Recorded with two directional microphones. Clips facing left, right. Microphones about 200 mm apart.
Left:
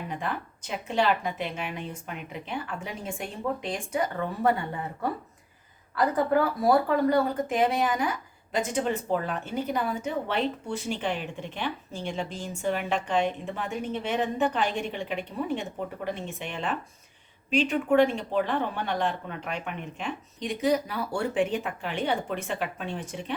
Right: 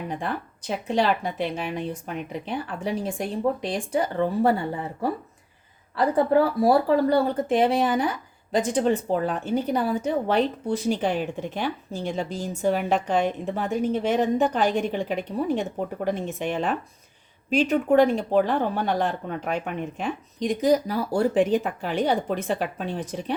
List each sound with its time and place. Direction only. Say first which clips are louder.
0.1 s speech: right 3 dB; 35° right (ahead or behind)
6.1 s speech: right 5 dB; 30° right (ahead or behind)